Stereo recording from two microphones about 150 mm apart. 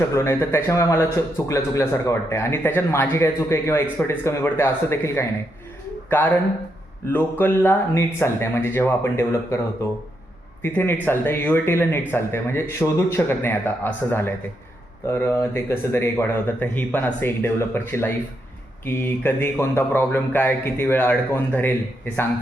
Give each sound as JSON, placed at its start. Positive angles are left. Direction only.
{"t": 0.1, "sound": "speech", "side_deg": 20}
{"t": 10.6, "sound": "speech", "side_deg": 15}